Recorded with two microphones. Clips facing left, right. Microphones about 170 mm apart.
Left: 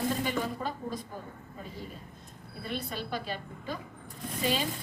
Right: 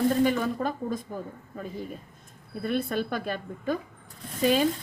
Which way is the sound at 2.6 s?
50° right (ahead or behind).